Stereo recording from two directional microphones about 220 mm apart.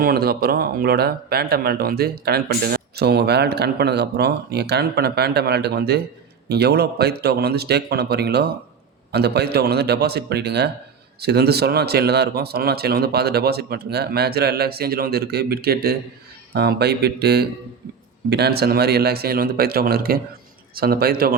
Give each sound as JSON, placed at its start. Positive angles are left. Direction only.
{"t": 0.0, "sound": "speech", "side_deg": -45}